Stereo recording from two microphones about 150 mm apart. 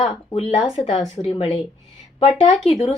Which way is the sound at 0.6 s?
35° left (ahead or behind).